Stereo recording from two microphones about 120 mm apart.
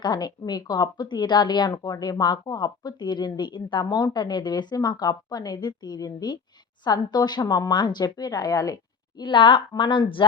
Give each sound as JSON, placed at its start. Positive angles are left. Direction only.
{"t": 0.0, "sound": "a woman's voice", "side_deg": 35}